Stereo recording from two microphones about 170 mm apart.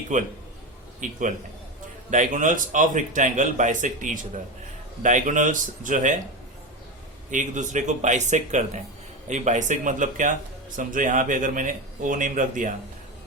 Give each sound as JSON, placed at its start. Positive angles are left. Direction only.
{"t": 0.1, "sound": "speech", "side_deg": -45}
{"t": 7.3, "sound": "speech", "side_deg": -45}